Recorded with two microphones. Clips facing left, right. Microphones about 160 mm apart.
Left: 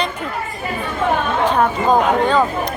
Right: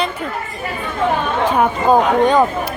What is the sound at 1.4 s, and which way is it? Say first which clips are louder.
Speech: right 2 dB; 10° right (ahead or behind).